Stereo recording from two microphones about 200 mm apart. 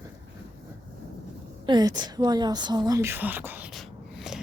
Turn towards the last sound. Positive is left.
turn(degrees=0)  # may be behind; listen again after turning